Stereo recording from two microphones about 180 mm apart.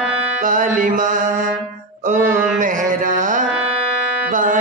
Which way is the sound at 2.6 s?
45° right (ahead or behind).